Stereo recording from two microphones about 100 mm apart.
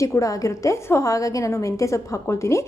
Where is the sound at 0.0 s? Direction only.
30° left (ahead or behind).